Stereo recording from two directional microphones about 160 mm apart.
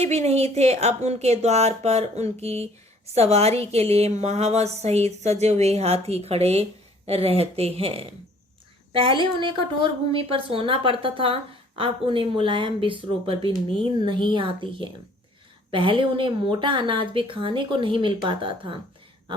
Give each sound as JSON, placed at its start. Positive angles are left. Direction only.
{"t": 0.0, "sound": "a woman's voice", "side_deg": -40}